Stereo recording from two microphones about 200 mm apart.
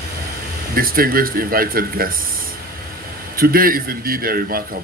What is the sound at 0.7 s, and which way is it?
Speech, 45° right (ahead or behind).